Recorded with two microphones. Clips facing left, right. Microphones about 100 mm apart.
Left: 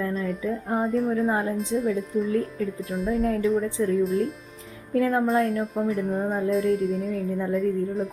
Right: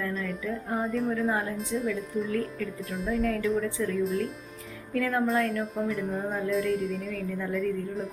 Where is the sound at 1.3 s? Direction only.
30° left (ahead or behind).